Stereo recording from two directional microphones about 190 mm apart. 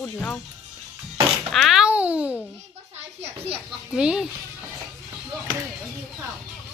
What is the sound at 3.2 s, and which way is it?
Speech, 30° right (ahead or behind).